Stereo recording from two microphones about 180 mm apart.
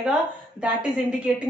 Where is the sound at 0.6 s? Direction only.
5° right (ahead or behind).